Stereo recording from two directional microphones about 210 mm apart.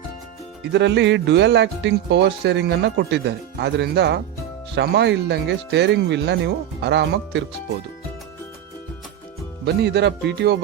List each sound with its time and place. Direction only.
0.6 s speech: 55° right (ahead or behind)
9.6 s music: 55° right (ahead or behind)